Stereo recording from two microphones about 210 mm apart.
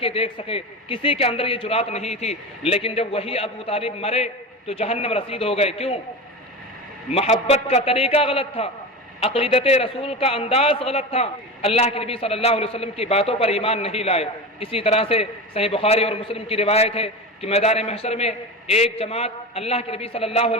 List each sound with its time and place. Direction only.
0.0 s a man's voice: 25° left (ahead or behind)
7.1 s a man's voice: 30° left (ahead or behind)